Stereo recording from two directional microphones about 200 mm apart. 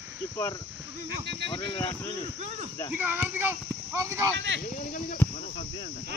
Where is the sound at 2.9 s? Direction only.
10° right (ahead or behind).